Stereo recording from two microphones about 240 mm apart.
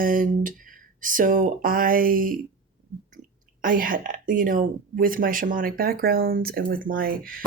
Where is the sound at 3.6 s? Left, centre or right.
Right.